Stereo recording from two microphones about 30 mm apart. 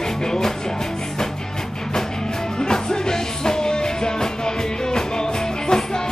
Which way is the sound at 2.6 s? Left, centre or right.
Left.